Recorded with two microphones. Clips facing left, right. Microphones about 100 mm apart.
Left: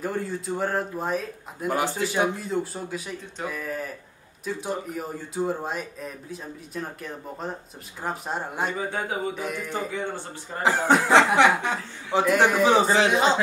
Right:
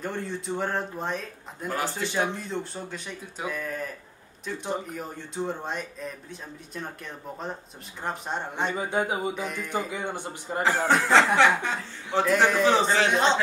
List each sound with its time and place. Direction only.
0.0 s speech: 5° left (ahead or behind)
8.7 s speech: 15° right (ahead or behind)
9.4 s a man's voice: 10° left (ahead or behind)
9.7 s speech: 15° right (ahead or behind)
10.9 s speech: 5° left (ahead or behind)
11.3 s a man's voice: 15° left (ahead or behind)